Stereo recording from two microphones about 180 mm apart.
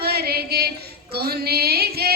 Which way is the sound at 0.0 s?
60° right (ahead or behind).